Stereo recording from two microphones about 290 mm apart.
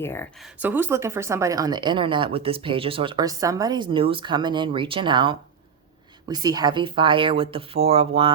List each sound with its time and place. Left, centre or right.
0.0 s speech: centre